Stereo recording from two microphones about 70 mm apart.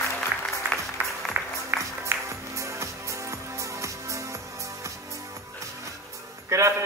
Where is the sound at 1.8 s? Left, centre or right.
Right.